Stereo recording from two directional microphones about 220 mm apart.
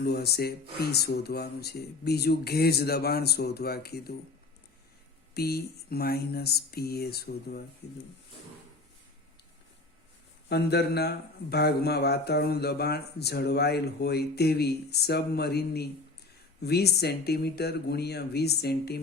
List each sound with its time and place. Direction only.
0.0 s speech: 45° left (ahead or behind)
5.3 s speech: 45° left (ahead or behind)
10.5 s speech: 50° left (ahead or behind)